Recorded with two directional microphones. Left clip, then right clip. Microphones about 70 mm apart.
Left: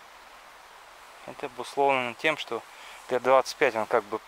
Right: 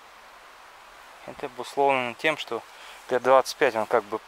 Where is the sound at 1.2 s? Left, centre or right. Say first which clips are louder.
Right 1 dB; centre.